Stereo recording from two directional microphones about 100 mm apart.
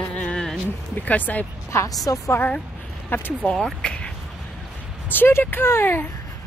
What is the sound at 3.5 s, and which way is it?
Speech, 5° left (ahead or behind).